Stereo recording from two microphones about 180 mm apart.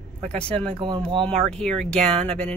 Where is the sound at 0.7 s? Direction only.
25° right (ahead or behind).